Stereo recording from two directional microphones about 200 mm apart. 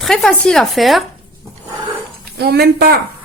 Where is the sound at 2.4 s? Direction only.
50° right (ahead or behind).